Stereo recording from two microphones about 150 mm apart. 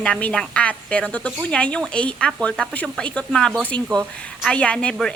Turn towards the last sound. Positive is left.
turn(degrees=5)  # may be behind; listen again after turning